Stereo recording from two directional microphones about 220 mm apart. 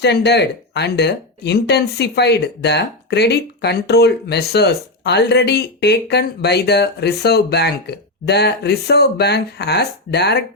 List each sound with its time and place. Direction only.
0.0 s speech: 50° left (ahead or behind)